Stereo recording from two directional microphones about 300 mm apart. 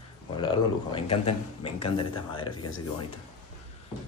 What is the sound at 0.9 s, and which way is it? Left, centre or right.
Speech, centre.